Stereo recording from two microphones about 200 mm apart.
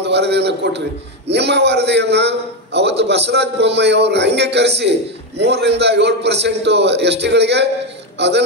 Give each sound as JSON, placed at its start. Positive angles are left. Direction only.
{"t": 0.0, "sound": "a man's voice", "side_deg": -55}